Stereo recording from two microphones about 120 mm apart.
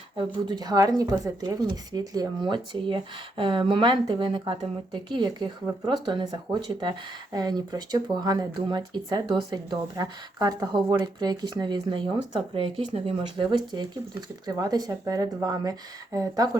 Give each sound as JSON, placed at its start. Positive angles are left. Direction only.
{"t": 0.4, "sound": "speech", "side_deg": -35}